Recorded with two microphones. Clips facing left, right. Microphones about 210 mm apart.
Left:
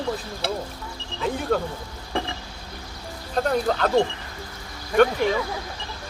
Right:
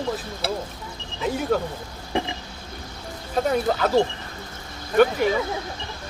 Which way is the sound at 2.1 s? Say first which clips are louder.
Right 2 dB; 20° right (ahead or behind).